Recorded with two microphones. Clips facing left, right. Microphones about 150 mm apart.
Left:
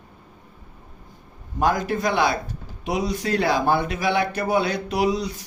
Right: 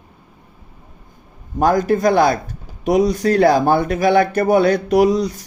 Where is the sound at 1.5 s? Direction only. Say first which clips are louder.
Right 7 dB; 45° right (ahead or behind).